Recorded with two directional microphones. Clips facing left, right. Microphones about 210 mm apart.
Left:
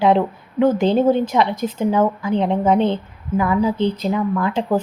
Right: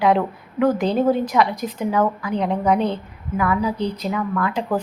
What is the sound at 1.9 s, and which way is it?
A woman's voice, 25° left (ahead or behind).